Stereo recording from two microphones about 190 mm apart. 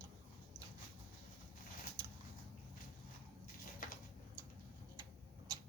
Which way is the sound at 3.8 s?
45° left (ahead or behind).